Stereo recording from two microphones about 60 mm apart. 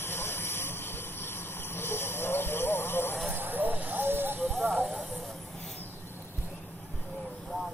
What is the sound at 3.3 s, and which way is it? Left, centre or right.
Hiss, right.